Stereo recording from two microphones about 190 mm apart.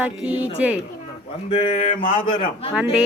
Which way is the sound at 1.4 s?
35° left (ahead or behind).